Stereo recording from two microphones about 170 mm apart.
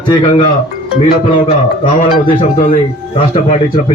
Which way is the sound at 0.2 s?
30° left (ahead or behind).